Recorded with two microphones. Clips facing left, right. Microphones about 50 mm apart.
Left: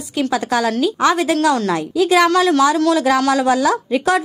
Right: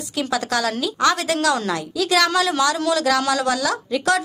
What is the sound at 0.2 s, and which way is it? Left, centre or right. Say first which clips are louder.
A woman's voice: left 4 dB; centre.